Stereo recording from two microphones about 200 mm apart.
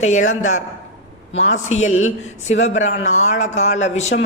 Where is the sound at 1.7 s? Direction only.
35° left (ahead or behind).